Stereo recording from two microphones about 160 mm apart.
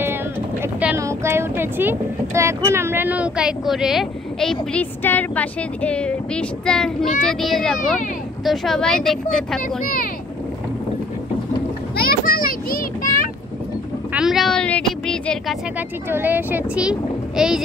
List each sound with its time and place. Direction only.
0.0 s speech: 15° right (ahead or behind); by 9.6 s centre (ahead or behind)
12.0 s children playing: 65° left (ahead or behind)
14.1 s a sound: centre (ahead or behind)
16.1 s speech: 10° right (ahead or behind)